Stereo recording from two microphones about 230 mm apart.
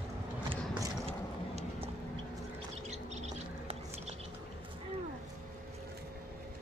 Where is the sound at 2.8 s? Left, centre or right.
Right.